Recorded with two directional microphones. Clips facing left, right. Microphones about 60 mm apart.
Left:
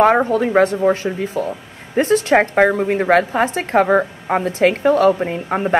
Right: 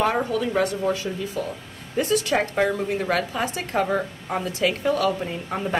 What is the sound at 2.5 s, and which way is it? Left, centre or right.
Speech, left.